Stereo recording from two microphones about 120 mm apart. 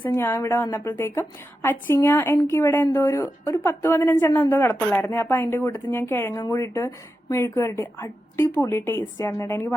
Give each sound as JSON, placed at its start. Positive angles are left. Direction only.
{"t": 0.0, "sound": "a woman's voice", "side_deg": 20}